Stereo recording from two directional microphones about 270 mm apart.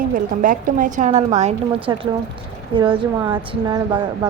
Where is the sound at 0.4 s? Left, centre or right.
Right.